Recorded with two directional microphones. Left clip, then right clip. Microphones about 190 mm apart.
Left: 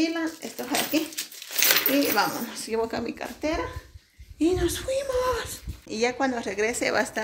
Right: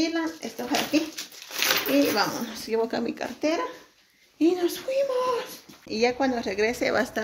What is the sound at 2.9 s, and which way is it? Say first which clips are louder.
Speech: right 2 dB; 25° right (ahead or behind).